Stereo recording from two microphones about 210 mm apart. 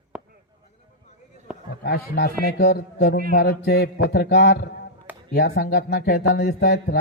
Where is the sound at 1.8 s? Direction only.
45° left (ahead or behind).